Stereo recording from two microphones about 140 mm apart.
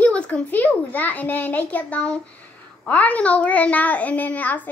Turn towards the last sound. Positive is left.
turn(degrees=10)  # may be behind; listen again after turning